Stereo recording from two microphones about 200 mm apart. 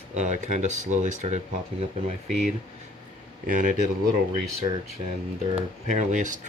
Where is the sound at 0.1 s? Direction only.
35° right (ahead or behind).